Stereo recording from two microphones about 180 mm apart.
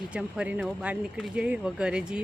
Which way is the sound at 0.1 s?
5° right (ahead or behind).